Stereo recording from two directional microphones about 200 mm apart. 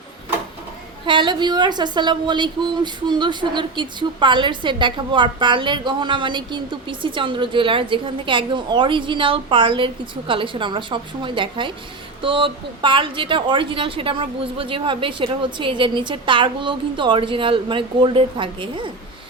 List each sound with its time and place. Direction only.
1.0 s a woman's voice: 25° right (ahead or behind)